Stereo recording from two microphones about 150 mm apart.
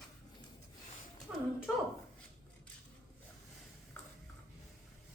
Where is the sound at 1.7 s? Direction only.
5° right (ahead or behind).